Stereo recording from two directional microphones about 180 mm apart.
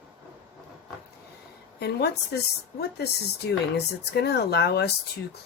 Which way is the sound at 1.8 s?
65° left (ahead or behind).